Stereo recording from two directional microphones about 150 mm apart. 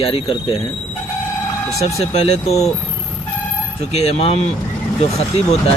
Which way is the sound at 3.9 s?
45° left (ahead or behind).